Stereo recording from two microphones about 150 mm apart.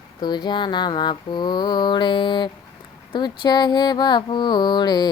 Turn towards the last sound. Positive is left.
turn(degrees=30)  # may be behind; listen again after turning